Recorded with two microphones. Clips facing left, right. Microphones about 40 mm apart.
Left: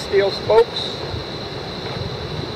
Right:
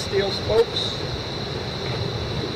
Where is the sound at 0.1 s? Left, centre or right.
Left.